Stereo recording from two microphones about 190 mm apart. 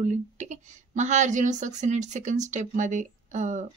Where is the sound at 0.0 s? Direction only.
40° right (ahead or behind).